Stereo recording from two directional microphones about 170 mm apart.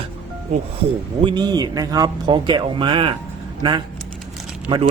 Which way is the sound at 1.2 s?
25° right (ahead or behind).